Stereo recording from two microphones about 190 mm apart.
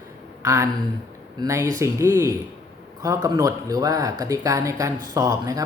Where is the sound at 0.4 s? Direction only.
15° right (ahead or behind).